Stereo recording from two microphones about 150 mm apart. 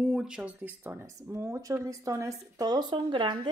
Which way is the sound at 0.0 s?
5° right (ahead or behind).